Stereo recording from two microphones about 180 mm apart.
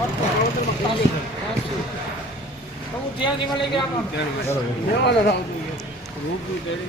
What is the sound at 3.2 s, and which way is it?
Speech, 25° left (ahead or behind).